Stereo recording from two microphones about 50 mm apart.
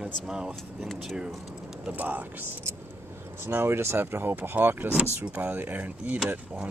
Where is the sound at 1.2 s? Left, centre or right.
Centre.